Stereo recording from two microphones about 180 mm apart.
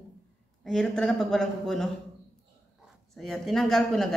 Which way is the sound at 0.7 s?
5° left (ahead or behind).